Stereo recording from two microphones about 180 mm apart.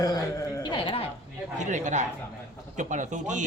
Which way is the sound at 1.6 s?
45° right (ahead or behind).